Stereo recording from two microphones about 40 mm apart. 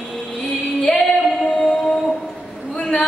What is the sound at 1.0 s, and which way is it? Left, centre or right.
Female singing, centre.